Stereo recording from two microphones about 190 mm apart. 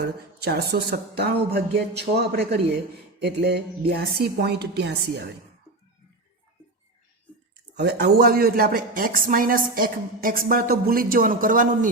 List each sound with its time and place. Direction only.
0.0 s speech: 60° right (ahead or behind)
7.8 s speech: 60° right (ahead or behind); by 11.9 s 45° right (ahead or behind)